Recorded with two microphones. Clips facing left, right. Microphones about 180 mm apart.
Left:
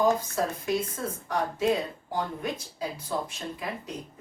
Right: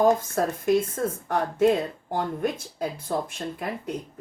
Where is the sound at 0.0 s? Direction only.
50° right (ahead or behind).